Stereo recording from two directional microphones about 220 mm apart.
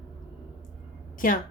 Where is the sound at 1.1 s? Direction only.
40° left (ahead or behind).